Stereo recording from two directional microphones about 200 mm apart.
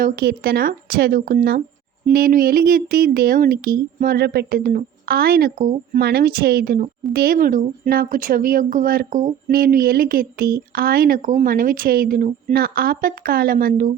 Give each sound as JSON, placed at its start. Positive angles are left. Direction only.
{"t": 0.0, "sound": "a woman's voice", "side_deg": -50}